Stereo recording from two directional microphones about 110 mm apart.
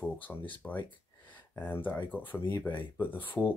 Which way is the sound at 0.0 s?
15° left (ahead or behind).